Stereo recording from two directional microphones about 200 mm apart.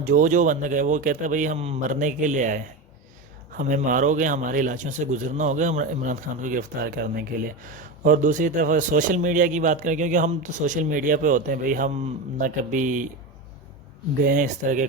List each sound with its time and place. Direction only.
0.0 s a man's voice: 40° right (ahead or behind)
14.2 s a man's voice: 45° right (ahead or behind)